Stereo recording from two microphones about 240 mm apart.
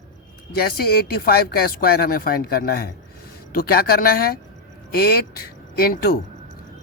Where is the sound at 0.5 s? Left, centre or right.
Left.